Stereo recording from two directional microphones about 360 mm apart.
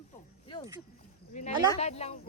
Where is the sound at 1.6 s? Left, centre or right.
Centre.